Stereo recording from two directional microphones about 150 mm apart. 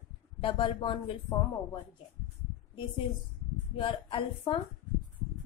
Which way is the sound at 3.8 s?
35° left (ahead or behind).